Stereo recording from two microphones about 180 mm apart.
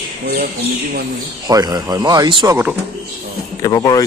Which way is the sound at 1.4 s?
20° right (ahead or behind).